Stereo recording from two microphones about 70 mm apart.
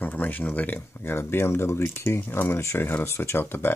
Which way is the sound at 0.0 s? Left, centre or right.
Left.